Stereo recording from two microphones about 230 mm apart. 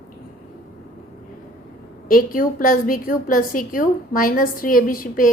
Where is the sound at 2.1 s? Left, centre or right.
Left.